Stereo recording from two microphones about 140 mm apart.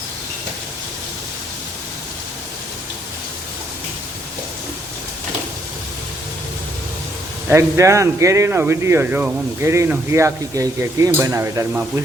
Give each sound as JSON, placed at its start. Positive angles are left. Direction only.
{"t": 7.5, "sound": "speech", "side_deg": -20}